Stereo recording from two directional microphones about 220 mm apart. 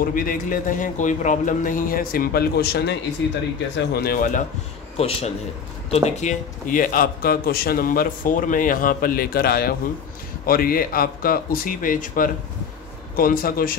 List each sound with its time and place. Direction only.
0.0 s a man's voice: 40° left (ahead or behind)
4.9 s a man's voice: 30° left (ahead or behind)